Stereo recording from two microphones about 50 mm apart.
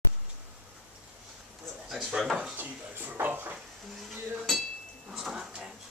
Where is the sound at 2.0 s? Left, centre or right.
Centre.